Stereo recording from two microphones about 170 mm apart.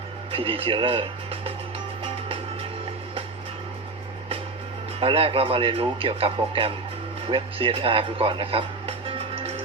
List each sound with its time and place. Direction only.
0.3 s speech: 35° right (ahead or behind)
4.9 s speech: 35° right (ahead or behind)